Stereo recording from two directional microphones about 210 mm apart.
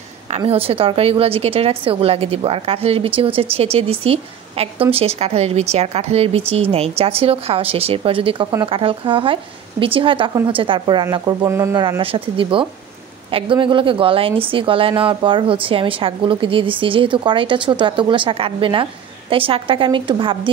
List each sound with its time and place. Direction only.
0.4 s a woman's voice: 25° right (ahead or behind)